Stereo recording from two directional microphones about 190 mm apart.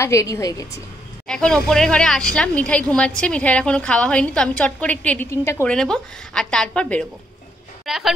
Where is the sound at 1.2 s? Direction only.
5° left (ahead or behind).